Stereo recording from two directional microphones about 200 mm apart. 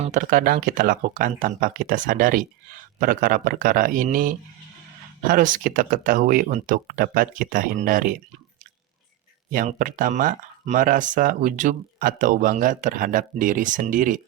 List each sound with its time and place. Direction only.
0.0 s speech: 40° right (ahead or behind)
9.5 s speech: 45° right (ahead or behind)